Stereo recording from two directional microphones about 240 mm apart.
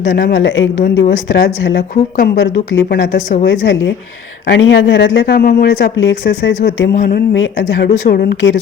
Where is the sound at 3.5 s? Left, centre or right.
Left.